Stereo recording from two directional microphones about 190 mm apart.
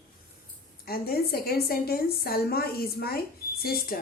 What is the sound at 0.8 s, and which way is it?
A woman's voice, 55° left (ahead or behind).